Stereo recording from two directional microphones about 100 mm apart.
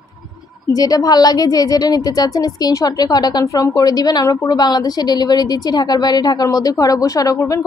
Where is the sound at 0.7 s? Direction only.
40° left (ahead or behind).